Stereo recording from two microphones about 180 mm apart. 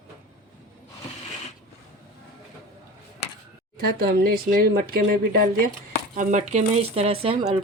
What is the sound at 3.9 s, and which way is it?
Speech, 60° right (ahead or behind).